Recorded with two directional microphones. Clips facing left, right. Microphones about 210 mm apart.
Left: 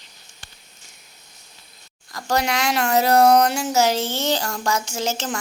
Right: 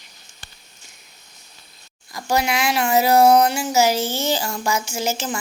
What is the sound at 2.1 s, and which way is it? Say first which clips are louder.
Speech: right 1 dB; 10° right (ahead or behind).